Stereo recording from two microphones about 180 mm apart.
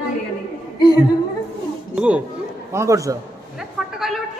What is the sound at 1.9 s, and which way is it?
A man's voice, 5° right (ahead or behind).